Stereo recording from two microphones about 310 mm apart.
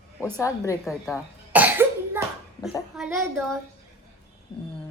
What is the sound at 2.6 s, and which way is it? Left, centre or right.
Speech, centre.